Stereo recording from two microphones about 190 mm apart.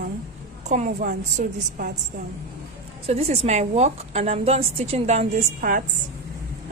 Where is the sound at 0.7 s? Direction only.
40° right (ahead or behind).